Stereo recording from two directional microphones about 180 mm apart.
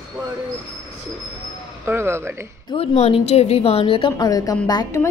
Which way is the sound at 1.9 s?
15° right (ahead or behind).